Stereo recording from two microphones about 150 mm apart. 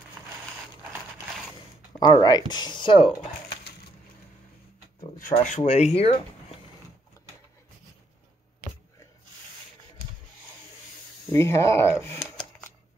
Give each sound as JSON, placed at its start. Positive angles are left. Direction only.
{"t": 2.0, "sound": "speech", "side_deg": 30}
{"t": 5.3, "sound": "speech", "side_deg": 50}
{"t": 11.3, "sound": "speech", "side_deg": 20}